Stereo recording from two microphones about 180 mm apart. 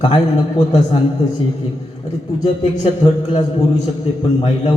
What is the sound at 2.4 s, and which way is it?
A man's voice, 25° left (ahead or behind).